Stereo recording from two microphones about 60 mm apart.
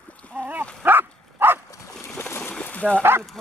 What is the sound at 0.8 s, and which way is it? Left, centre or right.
Dog, right.